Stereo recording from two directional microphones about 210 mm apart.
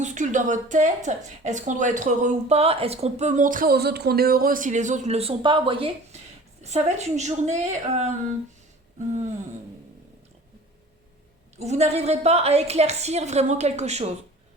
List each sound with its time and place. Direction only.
0.0 s a woman's voice: 35° right (ahead or behind)
11.5 s a woman's voice: 30° right (ahead or behind)